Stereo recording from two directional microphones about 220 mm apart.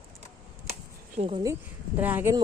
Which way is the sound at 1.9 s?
10° right (ahead or behind).